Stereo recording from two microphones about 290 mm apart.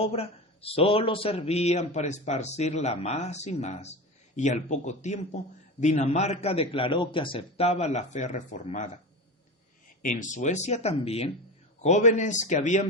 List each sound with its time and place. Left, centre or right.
0.1 s a man's voice: centre
10.0 s a man's voice: left